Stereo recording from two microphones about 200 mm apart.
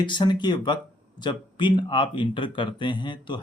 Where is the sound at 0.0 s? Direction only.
25° left (ahead or behind).